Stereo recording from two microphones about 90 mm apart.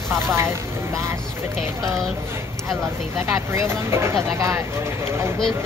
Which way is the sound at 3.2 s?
30° right (ahead or behind).